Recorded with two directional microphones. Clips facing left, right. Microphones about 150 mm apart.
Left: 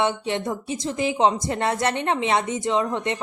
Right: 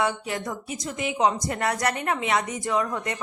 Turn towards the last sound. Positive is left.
turn(degrees=25)  # may be behind; listen again after turning